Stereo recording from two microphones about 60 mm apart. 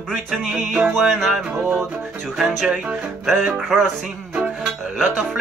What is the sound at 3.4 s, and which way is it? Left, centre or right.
Music, right.